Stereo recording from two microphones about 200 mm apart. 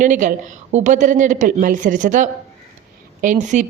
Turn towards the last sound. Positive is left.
turn(degrees=-40)  # may be behind; listen again after turning